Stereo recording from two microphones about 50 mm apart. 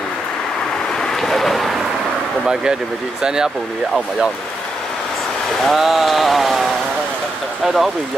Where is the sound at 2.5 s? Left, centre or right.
Centre.